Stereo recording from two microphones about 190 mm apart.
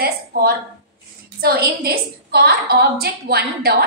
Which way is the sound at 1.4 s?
55° right (ahead or behind).